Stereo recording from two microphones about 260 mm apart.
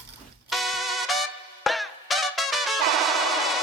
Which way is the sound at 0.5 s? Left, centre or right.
Centre.